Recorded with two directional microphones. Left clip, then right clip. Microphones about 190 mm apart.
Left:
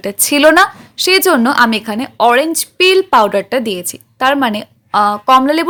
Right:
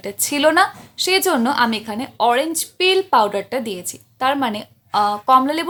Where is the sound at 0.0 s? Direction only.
30° left (ahead or behind).